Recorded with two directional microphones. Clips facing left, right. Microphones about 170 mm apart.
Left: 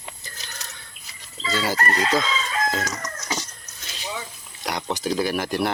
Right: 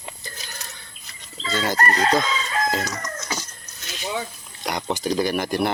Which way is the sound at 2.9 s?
20° left (ahead or behind).